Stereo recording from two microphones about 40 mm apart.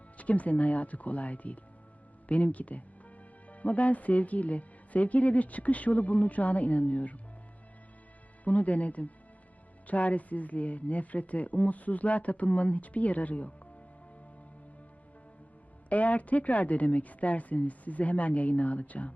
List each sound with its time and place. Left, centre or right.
0.2 s speech: left
8.4 s speech: left
15.9 s speech: left